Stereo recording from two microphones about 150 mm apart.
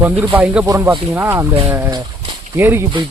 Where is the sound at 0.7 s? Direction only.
20° right (ahead or behind).